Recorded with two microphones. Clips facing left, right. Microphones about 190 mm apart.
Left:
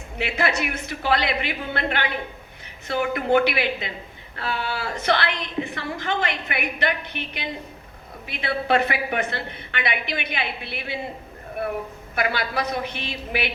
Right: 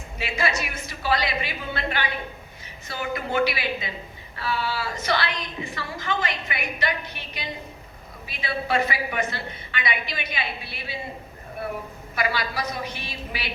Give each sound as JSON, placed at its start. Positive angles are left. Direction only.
{"t": 0.2, "sound": "a woman's voice", "side_deg": 65}
{"t": 12.1, "sound": "a woman's voice", "side_deg": 60}